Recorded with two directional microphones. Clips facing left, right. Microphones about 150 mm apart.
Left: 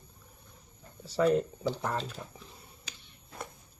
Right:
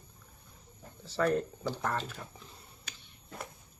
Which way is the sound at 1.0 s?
10° left (ahead or behind).